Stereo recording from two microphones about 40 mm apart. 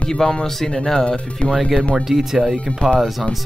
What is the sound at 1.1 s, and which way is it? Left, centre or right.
Speech, left.